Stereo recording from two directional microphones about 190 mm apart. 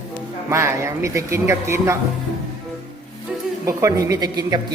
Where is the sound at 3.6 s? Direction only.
15° right (ahead or behind).